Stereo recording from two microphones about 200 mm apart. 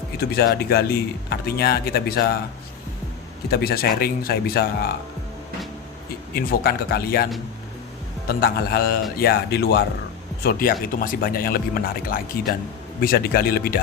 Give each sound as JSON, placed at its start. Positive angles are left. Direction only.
{"t": 0.2, "sound": "speech", "side_deg": 50}
{"t": 3.5, "sound": "speech", "side_deg": 50}
{"t": 6.3, "sound": "speech", "side_deg": 50}
{"t": 8.3, "sound": "speech", "side_deg": 50}